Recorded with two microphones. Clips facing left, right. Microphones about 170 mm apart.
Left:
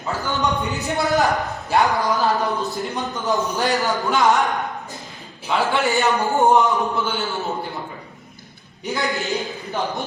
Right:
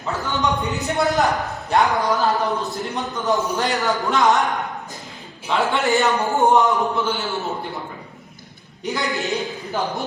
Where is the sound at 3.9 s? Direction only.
Centre (ahead or behind).